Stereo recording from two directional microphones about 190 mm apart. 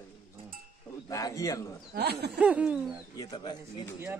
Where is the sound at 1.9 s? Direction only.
60° right (ahead or behind).